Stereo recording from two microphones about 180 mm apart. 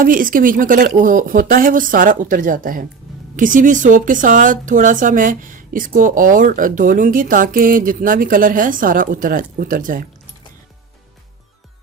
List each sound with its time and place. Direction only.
0.0 s speech: 50° right (ahead or behind)